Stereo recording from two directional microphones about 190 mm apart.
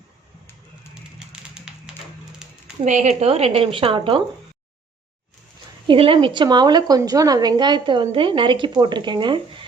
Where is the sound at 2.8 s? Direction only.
40° right (ahead or behind).